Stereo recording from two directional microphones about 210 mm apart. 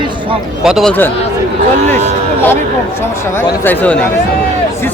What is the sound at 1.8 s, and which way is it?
Speech, 35° right (ahead or behind).